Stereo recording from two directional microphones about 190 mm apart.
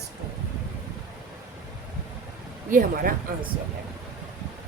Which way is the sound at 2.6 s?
45° right (ahead or behind).